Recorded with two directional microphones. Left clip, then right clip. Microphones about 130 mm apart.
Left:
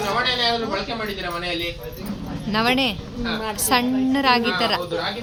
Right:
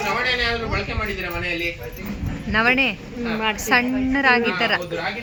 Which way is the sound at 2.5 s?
10° left (ahead or behind).